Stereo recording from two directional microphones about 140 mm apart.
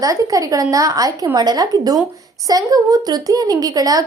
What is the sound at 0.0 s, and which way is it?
A woman's voice, 25° right (ahead or behind).